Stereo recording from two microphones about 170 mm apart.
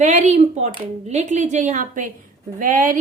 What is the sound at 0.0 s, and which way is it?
Speech, 45° right (ahead or behind).